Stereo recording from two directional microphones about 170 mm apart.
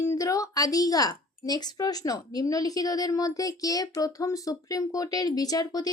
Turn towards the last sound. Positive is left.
turn(degrees=20)  # may be behind; listen again after turning